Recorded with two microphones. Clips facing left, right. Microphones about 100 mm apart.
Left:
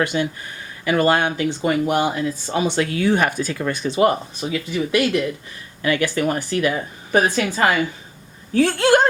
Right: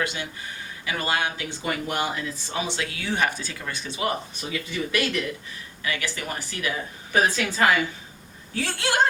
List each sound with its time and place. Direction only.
0.0 s a woman's voice: 50° left (ahead or behind)
1.6 s speech: 35° left (ahead or behind)
2.0 s speech: 25° left (ahead or behind)
2.6 s a woman's voice: 50° left (ahead or behind)
4.4 s speech: 25° left (ahead or behind)
5.8 s a woman's voice: 50° left (ahead or behind)
8.5 s a woman's voice: 50° left (ahead or behind)